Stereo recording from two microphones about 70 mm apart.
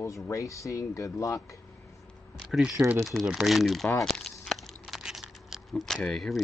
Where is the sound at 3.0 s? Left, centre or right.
Centre.